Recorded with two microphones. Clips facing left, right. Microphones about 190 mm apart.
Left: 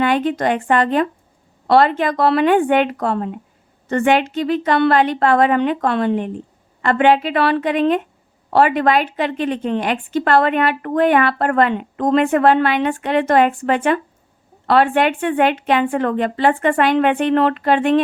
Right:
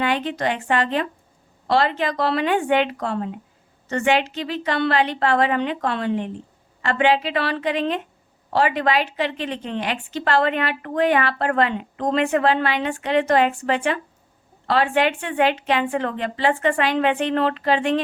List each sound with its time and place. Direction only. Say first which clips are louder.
0.0 s a woman's voice: left 5 dB; 50° left (ahead or behind)